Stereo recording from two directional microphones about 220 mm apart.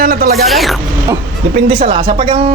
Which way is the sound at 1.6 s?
25° right (ahead or behind).